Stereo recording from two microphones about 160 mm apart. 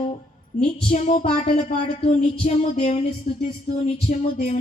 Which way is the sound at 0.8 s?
50° left (ahead or behind).